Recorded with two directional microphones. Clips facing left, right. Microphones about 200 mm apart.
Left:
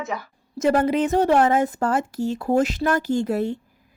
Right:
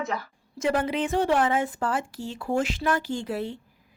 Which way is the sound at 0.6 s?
40° left (ahead or behind).